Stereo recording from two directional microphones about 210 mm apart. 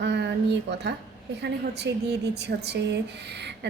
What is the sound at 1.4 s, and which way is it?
A woman's voice, 55° right (ahead or behind).